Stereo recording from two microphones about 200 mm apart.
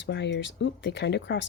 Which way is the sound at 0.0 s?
60° left (ahead or behind).